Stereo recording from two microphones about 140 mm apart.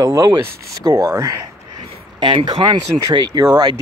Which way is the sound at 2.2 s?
35° right (ahead or behind).